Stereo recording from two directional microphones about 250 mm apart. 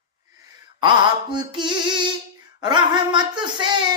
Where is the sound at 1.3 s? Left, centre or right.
Centre.